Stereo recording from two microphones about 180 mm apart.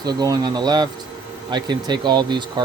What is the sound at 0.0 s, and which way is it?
Speech, 20° right (ahead or behind).